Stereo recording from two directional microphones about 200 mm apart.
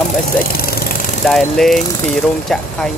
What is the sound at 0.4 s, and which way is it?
Vehicle, 50° left (ahead or behind).